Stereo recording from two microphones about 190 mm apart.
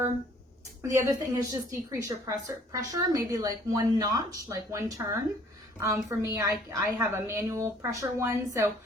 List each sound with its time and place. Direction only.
0.8 s a woman's voice: 15° right (ahead or behind)